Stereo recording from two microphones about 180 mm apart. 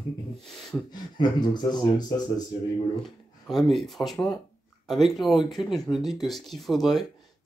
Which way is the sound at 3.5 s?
Centre (ahead or behind).